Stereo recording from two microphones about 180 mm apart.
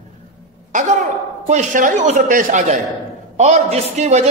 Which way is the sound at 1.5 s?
45° right (ahead or behind).